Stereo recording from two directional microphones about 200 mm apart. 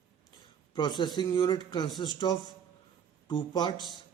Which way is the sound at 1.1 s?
20° left (ahead or behind).